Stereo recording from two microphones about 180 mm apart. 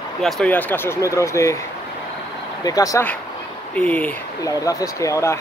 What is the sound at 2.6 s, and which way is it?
Speech, 20° left (ahead or behind).